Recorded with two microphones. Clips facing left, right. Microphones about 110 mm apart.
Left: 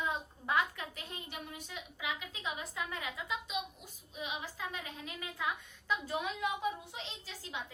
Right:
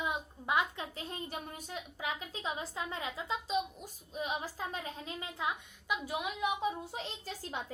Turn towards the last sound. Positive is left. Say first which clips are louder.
# right 4 dB
turn(degrees=-45)  # may be behind; listen again after turning